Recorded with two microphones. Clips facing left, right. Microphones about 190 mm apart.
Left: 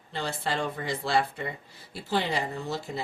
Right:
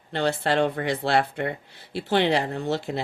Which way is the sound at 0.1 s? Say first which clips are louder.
Right 8 dB; 70° right (ahead or behind).